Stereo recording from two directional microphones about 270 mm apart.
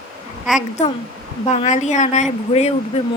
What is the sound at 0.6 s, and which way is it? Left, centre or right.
Speech, left.